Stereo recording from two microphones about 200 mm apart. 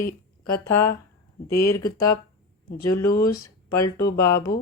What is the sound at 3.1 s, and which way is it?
A woman's voice, 50° left (ahead or behind).